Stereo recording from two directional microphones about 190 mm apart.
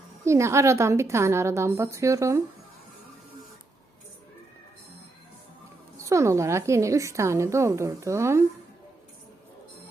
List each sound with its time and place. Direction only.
0.3 s a woman's voice: 15° right (ahead or behind)
6.0 s a woman's voice: 15° right (ahead or behind)